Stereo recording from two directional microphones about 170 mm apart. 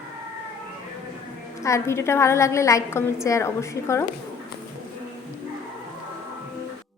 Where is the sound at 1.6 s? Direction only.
15° left (ahead or behind).